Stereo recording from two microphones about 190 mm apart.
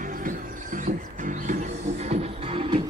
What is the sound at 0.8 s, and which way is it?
Music, 40° right (ahead or behind).